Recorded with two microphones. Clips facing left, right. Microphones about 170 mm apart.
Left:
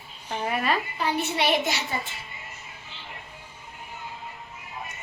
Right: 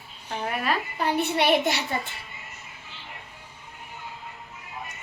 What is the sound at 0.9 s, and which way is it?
Speech, 55° right (ahead or behind).